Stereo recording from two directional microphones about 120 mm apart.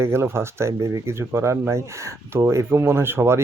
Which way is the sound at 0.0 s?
20° right (ahead or behind).